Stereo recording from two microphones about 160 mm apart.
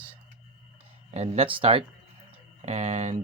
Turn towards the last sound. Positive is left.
turn(degrees=-45)  # may be behind; listen again after turning